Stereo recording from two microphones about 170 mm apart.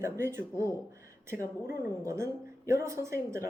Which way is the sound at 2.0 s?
15° right (ahead or behind).